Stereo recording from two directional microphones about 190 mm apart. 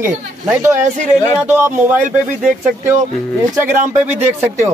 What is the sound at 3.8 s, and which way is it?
Speech, 40° right (ahead or behind).